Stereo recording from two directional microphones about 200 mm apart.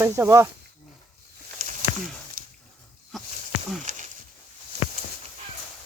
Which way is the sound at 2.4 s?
45° right (ahead or behind).